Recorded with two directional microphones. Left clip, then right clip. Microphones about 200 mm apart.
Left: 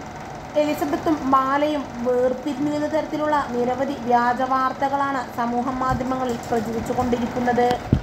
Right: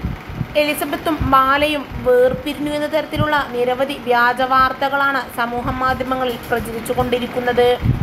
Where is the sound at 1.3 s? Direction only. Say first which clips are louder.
Right 6 dB; 20° right (ahead or behind).